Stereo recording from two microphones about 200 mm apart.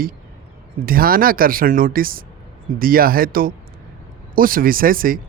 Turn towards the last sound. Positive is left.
turn(degrees=-45)  # may be behind; listen again after turning